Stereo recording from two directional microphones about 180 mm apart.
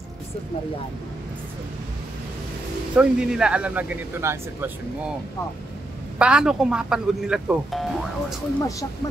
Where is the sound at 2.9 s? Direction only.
5° right (ahead or behind).